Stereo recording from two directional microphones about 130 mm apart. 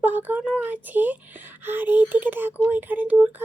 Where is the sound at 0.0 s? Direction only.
15° right (ahead or behind).